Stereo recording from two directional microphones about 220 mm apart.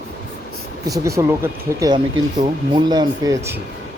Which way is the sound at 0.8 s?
15° right (ahead or behind).